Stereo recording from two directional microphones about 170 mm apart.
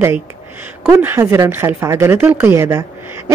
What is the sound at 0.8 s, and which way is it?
Speech, 15° right (ahead or behind).